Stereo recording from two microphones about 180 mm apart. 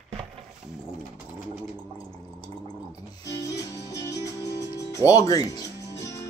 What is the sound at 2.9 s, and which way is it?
Music, 20° left (ahead or behind).